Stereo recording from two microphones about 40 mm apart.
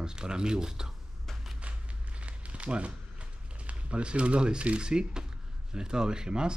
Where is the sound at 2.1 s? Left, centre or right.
Right.